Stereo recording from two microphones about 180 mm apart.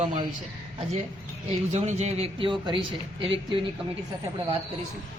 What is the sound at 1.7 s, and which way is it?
A man's voice, 40° right (ahead or behind).